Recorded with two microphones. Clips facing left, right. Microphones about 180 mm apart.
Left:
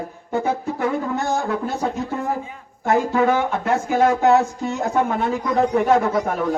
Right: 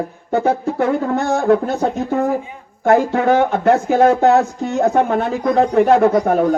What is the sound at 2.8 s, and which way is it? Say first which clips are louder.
A man's voice: right 4 dB; 60° right (ahead or behind).